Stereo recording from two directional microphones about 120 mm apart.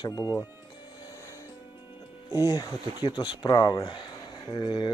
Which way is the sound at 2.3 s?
30° left (ahead or behind).